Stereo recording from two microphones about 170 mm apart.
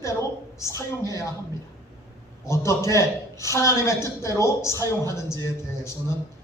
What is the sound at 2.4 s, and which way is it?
A man's voice, 15° left (ahead or behind).